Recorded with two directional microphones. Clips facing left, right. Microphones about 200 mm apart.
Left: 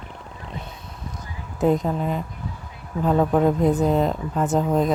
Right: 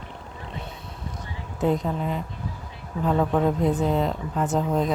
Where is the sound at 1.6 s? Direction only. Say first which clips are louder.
Left 3 dB; 45° left (ahead or behind).